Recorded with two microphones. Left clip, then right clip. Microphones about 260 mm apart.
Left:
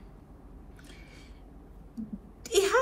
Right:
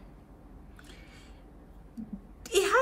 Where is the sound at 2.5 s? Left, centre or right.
Centre.